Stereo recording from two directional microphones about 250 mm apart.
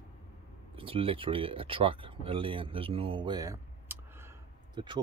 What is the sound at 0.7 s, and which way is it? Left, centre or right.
Speech, right.